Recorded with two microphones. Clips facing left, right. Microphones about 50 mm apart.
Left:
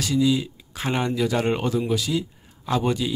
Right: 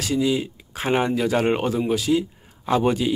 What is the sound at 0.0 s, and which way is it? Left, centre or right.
Speech, right.